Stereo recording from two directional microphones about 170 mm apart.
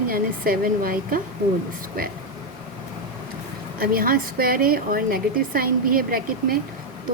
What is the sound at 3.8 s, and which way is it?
A woman's voice, 60° right (ahead or behind).